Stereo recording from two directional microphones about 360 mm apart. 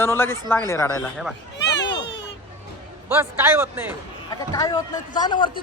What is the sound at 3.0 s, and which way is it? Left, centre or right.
Speech, centre.